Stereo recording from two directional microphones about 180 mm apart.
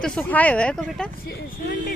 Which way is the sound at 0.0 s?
5° left (ahead or behind).